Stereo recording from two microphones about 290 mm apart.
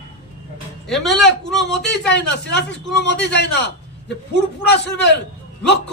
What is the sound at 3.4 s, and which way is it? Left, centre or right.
A man's voice, left.